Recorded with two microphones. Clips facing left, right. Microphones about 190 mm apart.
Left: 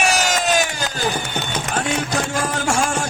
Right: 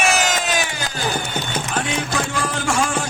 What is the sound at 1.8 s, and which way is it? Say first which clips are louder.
Music: left 1 dB; 45° left (ahead or behind).